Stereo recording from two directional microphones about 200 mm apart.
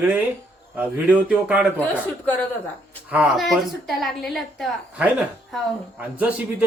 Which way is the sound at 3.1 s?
5° right (ahead or behind).